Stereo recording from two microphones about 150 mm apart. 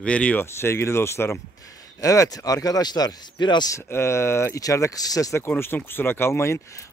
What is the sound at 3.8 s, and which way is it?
Speech, 15° left (ahead or behind).